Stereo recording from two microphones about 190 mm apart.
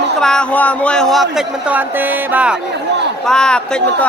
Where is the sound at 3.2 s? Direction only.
5° left (ahead or behind).